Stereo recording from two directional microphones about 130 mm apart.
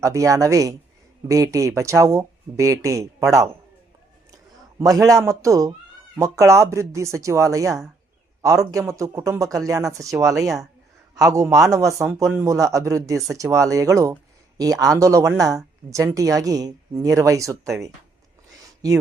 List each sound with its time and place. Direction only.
0.0 s speech: 25° right (ahead or behind)
4.8 s speech: 25° right (ahead or behind)